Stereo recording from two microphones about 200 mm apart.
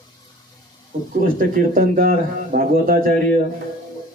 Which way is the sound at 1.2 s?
45° right (ahead or behind).